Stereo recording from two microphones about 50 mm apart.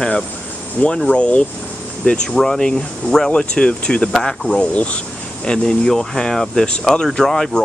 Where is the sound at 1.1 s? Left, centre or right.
Left.